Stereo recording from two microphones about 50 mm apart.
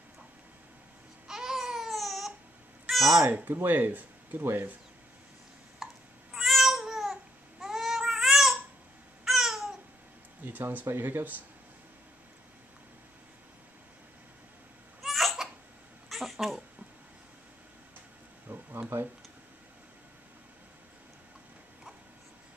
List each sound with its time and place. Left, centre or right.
1.2 s babbling: centre
2.9 s meow: centre
3.3 s speech: right
4.4 s speech: right
5.8 s a sound: centre
6.3 s cat: centre
7.6 s baby cry: centre
9.2 s babbling: centre
10.4 s a sound: right
10.9 s speech: right
15.0 s a sound: centre
18.5 s a sound: right